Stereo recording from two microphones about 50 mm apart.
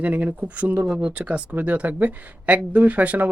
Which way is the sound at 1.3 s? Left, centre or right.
Right.